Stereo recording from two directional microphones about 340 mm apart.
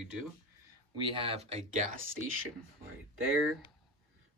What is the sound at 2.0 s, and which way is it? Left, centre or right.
Speech, right.